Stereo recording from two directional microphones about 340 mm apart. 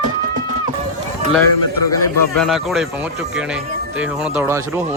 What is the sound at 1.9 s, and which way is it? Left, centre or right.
Speech, centre.